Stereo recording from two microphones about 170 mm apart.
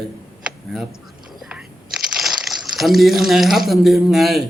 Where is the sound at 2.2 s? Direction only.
Centre (ahead or behind).